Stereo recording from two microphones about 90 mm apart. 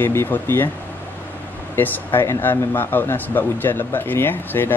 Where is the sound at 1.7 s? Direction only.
25° left (ahead or behind).